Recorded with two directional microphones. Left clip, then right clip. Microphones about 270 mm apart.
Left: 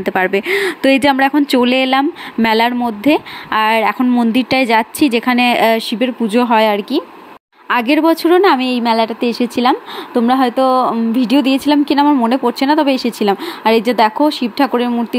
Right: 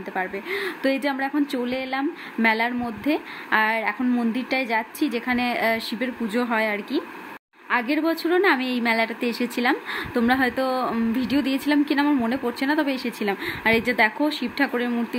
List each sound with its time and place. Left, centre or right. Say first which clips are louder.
0.0 s speech: left 13 dB; left